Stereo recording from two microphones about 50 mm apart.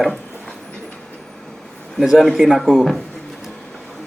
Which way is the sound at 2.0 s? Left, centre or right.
Centre.